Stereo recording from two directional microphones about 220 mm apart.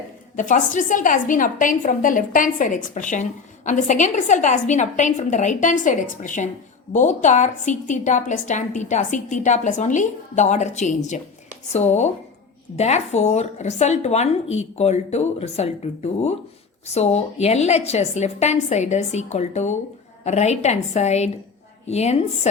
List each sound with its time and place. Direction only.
0.3 s a woman's voice: 35° left (ahead or behind)